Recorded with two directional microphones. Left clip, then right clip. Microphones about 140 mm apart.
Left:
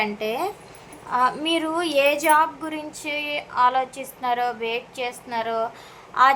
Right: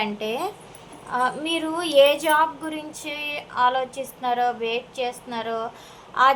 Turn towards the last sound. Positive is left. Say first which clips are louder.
# left 1 dB
turn(degrees=10)  # may be behind; listen again after turning